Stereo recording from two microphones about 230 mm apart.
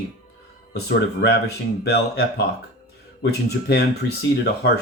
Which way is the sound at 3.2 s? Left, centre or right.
Left.